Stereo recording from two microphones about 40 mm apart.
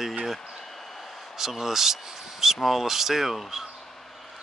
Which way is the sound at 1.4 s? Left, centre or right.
Centre.